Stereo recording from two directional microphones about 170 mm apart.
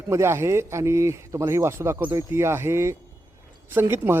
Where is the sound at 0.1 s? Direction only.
15° right (ahead or behind).